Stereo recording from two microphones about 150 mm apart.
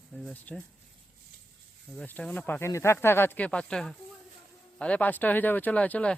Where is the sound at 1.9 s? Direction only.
10° left (ahead or behind).